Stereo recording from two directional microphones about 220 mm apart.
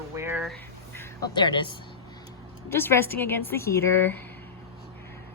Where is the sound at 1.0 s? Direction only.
20° left (ahead or behind).